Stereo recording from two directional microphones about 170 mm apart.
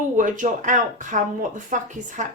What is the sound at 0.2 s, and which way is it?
Speech, 50° right (ahead or behind).